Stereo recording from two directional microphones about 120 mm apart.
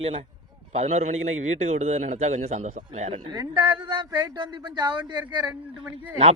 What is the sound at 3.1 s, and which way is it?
Speech, 40° right (ahead or behind).